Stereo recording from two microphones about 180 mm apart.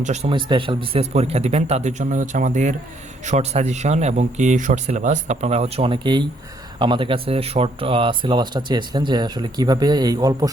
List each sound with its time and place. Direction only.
0.0 s speech: 40° right (ahead or behind)
0.3 s speech: 25° right (ahead or behind)